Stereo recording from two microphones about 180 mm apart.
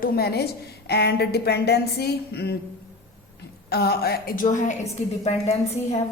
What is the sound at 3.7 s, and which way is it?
A woman's voice, 60° left (ahead or behind).